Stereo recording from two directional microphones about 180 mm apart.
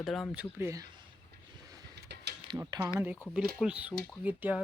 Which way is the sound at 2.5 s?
20° right (ahead or behind).